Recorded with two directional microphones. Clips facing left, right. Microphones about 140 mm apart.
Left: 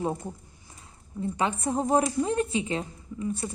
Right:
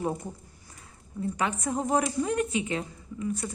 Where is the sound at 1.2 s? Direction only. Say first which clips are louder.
Left 2 dB; 25° left (ahead or behind).